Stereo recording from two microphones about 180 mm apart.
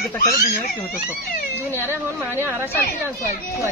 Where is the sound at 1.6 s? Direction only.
15° right (ahead or behind).